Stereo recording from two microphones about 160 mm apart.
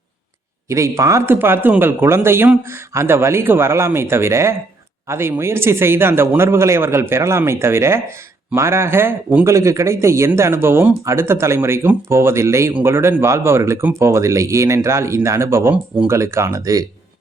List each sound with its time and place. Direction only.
0.7 s speech: 20° right (ahead or behind)